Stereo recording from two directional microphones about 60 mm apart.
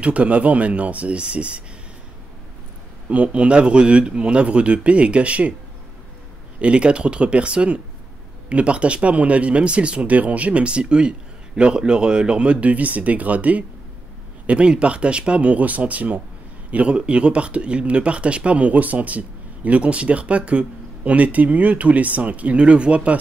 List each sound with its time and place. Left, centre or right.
0.0 s speech: right
3.1 s speech: centre
6.6 s speech: centre